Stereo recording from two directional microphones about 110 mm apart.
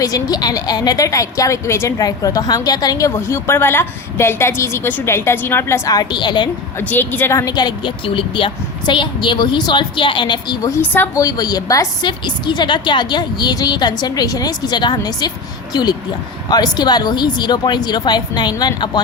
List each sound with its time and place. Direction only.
0.0 s a woman's voice: 35° left (ahead or behind)
3.2 s a woman's voice: 25° left (ahead or behind); by 6.5 s 45° left (ahead or behind)
6.7 s a woman's voice: 20° left (ahead or behind)
7.5 s a woman's voice: 40° left (ahead or behind)
8.0 s a woman's voice: 55° left (ahead or behind)
10.8 s a woman's voice: 20° left (ahead or behind)
11.2 s a woman's voice: 35° left (ahead or behind)
12.0 s a woman's voice: 45° left (ahead or behind)